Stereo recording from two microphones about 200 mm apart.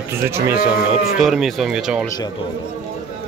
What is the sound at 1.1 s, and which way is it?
Speech, centre (ahead or behind).